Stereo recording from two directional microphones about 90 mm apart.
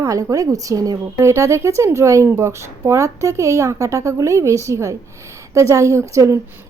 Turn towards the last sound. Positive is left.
turn(degrees=-35)  # may be behind; listen again after turning